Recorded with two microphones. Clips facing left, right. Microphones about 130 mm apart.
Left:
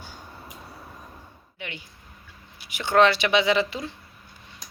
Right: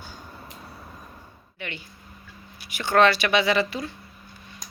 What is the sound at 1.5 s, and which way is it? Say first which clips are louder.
A woman's voice: right 2 dB; 15° left (ahead or behind).